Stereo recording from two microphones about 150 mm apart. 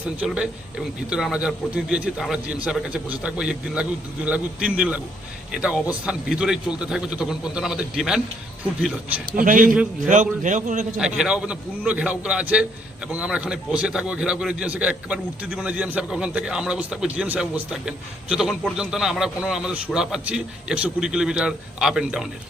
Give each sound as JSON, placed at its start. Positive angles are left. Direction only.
{"t": 0.0, "sound": "a man's voice", "side_deg": -10}
{"t": 9.3, "sound": "a man's voice", "side_deg": -65}
{"t": 10.9, "sound": "a man's voice", "side_deg": -5}